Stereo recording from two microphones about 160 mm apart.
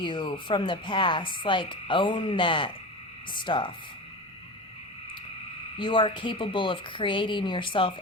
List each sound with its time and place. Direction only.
0.0 s frog: 30° left (ahead or behind)
3.3 s speech: 30° left (ahead or behind)
5.7 s frog: 30° left (ahead or behind)